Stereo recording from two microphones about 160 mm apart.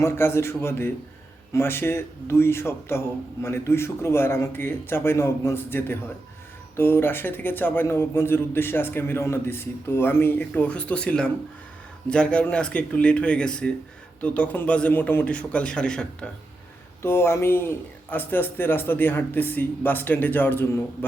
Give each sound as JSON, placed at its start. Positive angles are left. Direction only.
{"t": 0.0, "sound": "a man's voice", "side_deg": 15}